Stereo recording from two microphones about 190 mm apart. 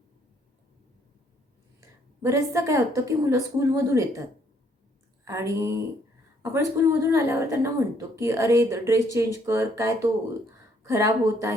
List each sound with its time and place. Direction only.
2.2 s a woman's voice: 15° right (ahead or behind)
5.2 s a woman's voice: 15° right (ahead or behind)